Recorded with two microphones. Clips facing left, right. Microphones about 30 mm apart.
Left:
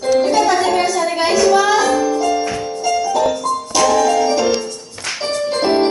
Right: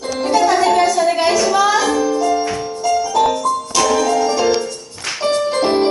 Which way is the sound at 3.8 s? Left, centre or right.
Centre.